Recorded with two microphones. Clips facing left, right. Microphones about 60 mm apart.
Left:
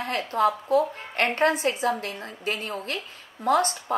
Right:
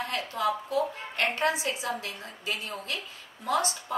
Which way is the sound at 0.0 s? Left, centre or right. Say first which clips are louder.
Left 6 dB; left.